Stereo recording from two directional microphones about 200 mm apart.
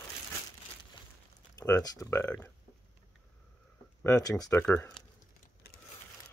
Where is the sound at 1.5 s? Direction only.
15° left (ahead or behind).